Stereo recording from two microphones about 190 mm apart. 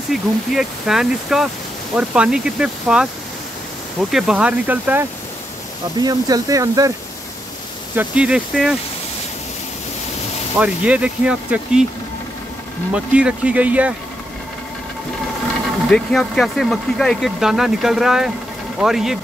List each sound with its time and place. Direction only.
0.1 s speech: centre (ahead or behind)
4.1 s speech: centre (ahead or behind)
5.9 s speech: 20° right (ahead or behind)
7.9 s speech: 10° right (ahead or behind)
10.6 s speech: 5° right (ahead or behind)
12.9 s speech: 5° right (ahead or behind)
15.9 s speech: centre (ahead or behind)